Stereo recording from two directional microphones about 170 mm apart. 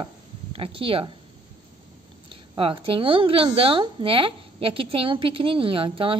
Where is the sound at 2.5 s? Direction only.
30° right (ahead or behind).